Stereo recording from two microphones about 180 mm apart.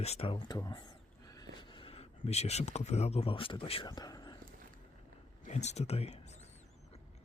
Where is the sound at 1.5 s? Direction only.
30° left (ahead or behind).